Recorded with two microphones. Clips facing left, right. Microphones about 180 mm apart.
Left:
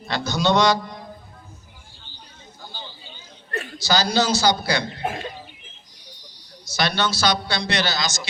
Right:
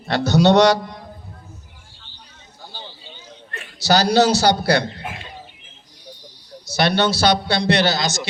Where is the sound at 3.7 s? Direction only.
70° right (ahead or behind).